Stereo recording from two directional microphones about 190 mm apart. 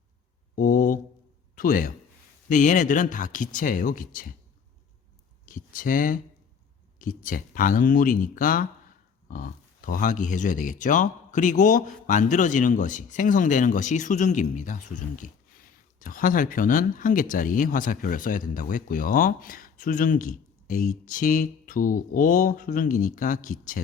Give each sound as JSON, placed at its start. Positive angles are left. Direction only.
{"t": 0.5, "sound": "a man's voice", "side_deg": 45}
{"t": 5.5, "sound": "speech", "side_deg": 45}